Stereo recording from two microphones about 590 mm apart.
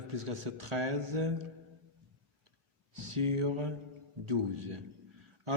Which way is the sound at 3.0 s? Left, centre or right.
Right.